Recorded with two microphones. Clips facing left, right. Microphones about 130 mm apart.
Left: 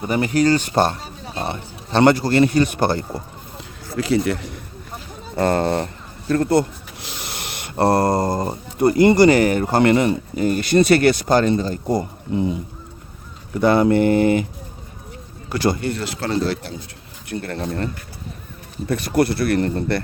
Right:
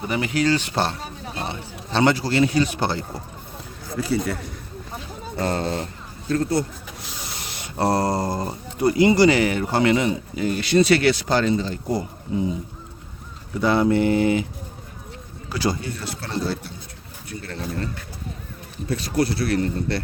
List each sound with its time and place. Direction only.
0.1 s a man's voice: 45° left (ahead or behind)
3.9 s speech: 90° left
5.4 s speech: 55° left (ahead or behind)
12.3 s speech: 65° left (ahead or behind)
13.5 s speech: 55° left (ahead or behind)
15.4 s a man's voice: 60° left (ahead or behind); by 16.7 s 90° left
17.2 s speech: 60° left (ahead or behind)
18.9 s speech: 55° left (ahead or behind)